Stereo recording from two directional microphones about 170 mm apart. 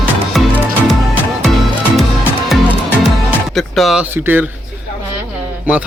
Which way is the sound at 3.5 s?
Centre (ahead or behind).